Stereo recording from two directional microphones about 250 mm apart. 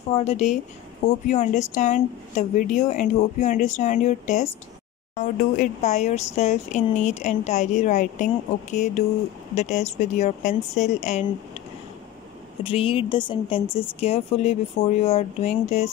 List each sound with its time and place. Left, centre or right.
0.1 s a woman's voice: left
12.6 s a woman's voice: left